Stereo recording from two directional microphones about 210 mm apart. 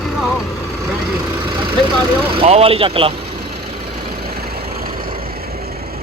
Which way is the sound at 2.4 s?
30° right (ahead or behind).